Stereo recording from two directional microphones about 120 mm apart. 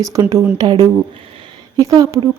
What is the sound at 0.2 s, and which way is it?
Speech, 30° right (ahead or behind).